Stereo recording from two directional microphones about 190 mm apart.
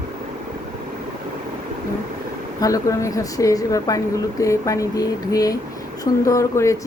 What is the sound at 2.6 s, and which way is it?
Speech, 15° left (ahead or behind).